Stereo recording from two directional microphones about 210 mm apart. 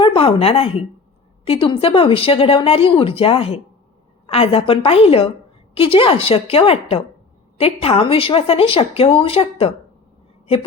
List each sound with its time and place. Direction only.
0.0 s speech: 25° left (ahead or behind)